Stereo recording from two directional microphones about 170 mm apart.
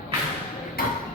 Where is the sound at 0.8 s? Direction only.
60° left (ahead or behind).